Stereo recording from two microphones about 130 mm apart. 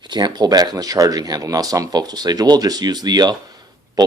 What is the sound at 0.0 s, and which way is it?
Speech, 35° right (ahead or behind).